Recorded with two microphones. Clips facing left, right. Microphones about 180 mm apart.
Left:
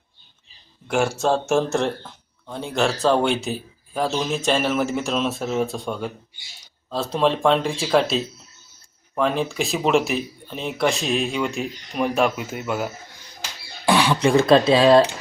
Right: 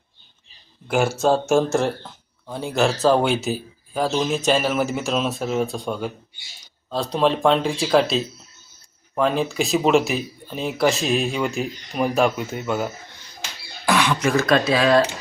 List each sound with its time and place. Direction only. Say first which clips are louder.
0.9 s speech: right 2 dB; centre (ahead or behind)
13.8 s speech: left 2 dB; 30° left (ahead or behind)